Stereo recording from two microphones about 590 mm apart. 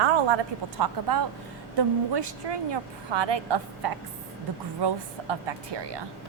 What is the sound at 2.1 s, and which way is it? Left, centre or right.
A woman's voice, right.